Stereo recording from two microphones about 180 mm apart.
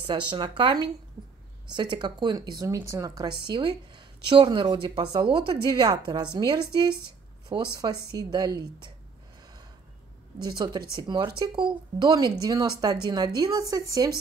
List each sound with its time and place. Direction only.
0.0 s a woman's voice: 25° right (ahead or behind)
11.0 s a woman's voice: 25° right (ahead or behind)